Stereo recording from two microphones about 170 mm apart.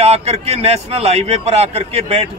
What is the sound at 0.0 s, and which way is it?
A man's voice, 40° right (ahead or behind).